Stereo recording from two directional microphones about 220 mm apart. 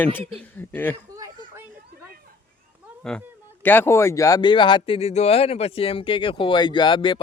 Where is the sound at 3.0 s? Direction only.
5° left (ahead or behind).